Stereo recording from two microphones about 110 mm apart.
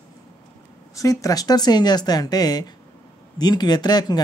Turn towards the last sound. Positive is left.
turn(degrees=35)  # may be behind; listen again after turning